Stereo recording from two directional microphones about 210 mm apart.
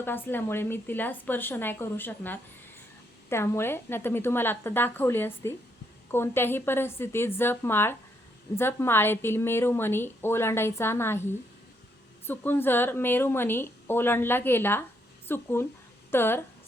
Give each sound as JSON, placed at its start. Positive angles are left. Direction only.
{"t": 0.0, "sound": "a woman's voice", "side_deg": 10}